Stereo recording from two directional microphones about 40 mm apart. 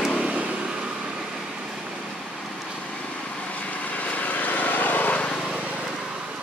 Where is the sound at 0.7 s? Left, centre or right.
Right.